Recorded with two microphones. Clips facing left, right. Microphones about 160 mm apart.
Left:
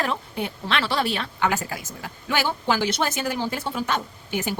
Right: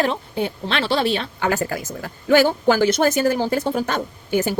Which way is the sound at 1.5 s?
50° right (ahead or behind).